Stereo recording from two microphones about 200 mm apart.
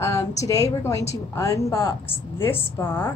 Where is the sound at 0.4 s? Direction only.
15° left (ahead or behind).